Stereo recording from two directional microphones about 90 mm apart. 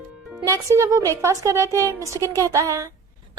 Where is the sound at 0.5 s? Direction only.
35° right (ahead or behind).